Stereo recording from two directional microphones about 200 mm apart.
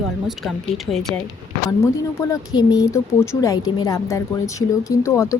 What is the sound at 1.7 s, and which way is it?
Speech, 15° left (ahead or behind).